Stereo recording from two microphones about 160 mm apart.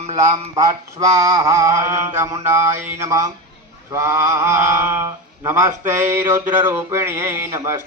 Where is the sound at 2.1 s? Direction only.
20° right (ahead or behind).